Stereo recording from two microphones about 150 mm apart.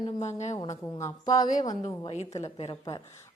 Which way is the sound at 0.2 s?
50° left (ahead or behind).